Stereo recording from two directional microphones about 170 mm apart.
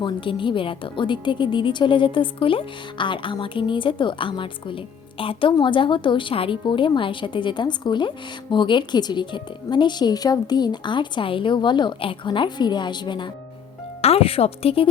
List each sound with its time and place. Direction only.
0.0 s a woman's voice: 30° left (ahead or behind)